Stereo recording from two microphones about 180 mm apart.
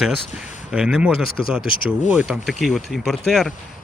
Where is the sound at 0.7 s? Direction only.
5° right (ahead or behind).